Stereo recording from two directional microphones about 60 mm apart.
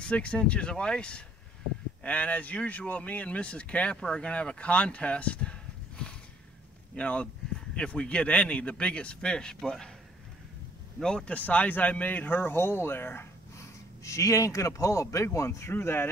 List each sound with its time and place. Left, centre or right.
0.0 s speech: centre
11.0 s speech: centre
11.3 s speech: left
14.0 s speech: left
15.7 s speech: left